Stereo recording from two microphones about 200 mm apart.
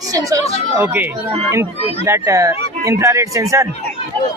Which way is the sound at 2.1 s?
15° right (ahead or behind).